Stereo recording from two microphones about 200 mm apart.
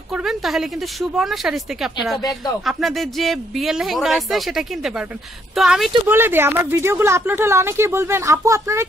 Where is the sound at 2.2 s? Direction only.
20° left (ahead or behind).